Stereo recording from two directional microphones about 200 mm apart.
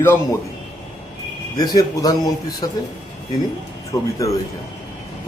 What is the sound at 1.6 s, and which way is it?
A man's voice, 20° left (ahead or behind).